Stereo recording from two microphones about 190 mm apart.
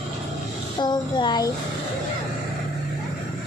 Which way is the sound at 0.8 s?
20° left (ahead or behind).